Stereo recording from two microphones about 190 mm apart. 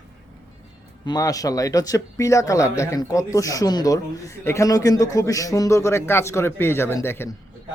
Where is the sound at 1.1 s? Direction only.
20° left (ahead or behind).